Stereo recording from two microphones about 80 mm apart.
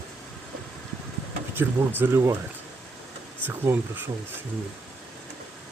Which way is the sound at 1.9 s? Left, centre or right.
Right.